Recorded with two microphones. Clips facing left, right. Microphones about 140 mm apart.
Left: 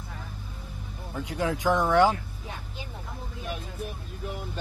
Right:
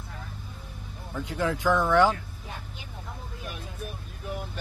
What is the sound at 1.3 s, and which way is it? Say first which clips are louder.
Speech: even; 10° left (ahead or behind).